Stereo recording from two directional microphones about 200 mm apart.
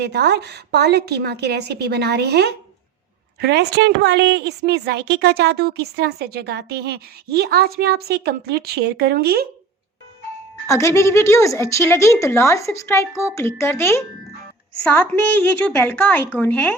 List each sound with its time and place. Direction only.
0.0 s a woman's voice: 55° right (ahead or behind)
10.7 s a woman's voice: 15° left (ahead or behind)